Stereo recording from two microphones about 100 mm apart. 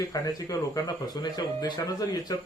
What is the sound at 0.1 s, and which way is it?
Speech, 40° left (ahead or behind).